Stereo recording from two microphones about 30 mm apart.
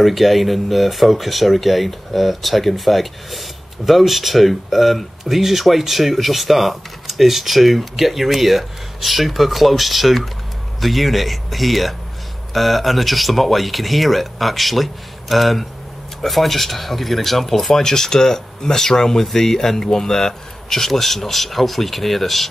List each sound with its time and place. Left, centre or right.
0.0 s speech: centre